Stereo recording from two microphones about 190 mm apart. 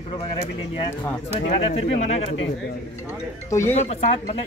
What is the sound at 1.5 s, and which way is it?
Speech, 30° left (ahead or behind).